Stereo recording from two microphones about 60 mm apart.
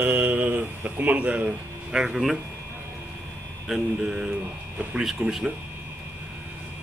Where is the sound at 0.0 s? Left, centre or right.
Right.